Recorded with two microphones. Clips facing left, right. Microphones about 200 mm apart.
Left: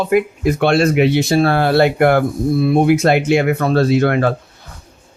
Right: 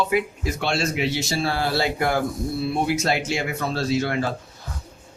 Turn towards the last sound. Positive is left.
turn(degrees=60)  # may be behind; listen again after turning